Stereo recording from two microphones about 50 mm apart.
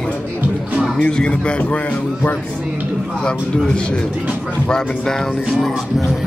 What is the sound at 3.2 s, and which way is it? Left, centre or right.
A man's voice, centre.